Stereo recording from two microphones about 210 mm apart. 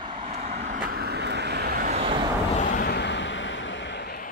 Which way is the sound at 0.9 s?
50° right (ahead or behind).